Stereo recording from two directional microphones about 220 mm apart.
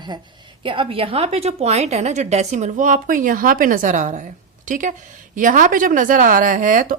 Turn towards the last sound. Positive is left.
turn(degrees=-35)  # may be behind; listen again after turning